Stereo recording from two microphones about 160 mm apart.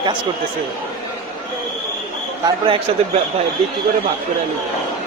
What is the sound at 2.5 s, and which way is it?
Speech, 30° right (ahead or behind).